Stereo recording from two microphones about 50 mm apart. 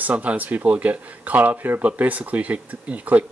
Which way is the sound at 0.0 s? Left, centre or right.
Right.